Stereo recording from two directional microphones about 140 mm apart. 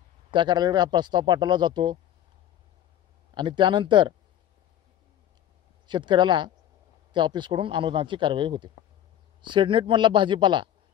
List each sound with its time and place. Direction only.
0.3 s speech: 35° right (ahead or behind)
3.3 s speech: 35° right (ahead or behind)
5.9 s speech: 35° right (ahead or behind)